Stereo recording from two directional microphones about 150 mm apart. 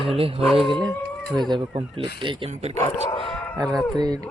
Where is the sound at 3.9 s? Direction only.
25° right (ahead or behind).